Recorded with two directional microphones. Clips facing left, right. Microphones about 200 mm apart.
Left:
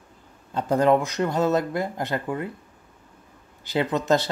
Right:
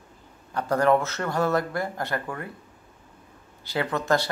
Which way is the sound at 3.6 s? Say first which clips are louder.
Left 3 dB; 20° left (ahead or behind).